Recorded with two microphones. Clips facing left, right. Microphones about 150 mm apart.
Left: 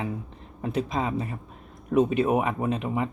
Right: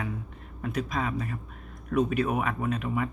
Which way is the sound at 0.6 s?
25° left (ahead or behind).